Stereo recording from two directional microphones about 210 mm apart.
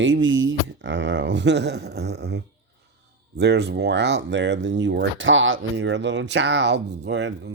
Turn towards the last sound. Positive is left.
turn(degrees=-55)  # may be behind; listen again after turning